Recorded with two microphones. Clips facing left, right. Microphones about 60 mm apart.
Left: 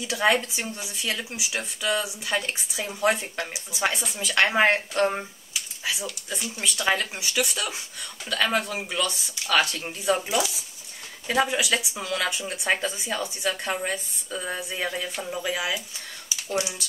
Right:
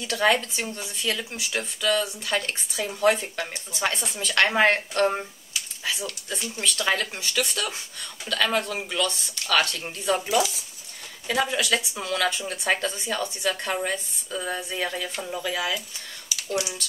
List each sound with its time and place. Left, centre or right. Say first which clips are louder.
0.0 s speech: even; centre
12.2 s speech: right 4 dB; centre
16.3 s typing: even; left